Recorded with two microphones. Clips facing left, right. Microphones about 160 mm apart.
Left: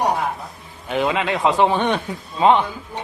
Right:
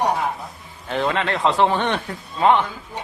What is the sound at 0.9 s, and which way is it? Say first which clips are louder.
Speech: left 1 dB; 10° left (ahead or behind).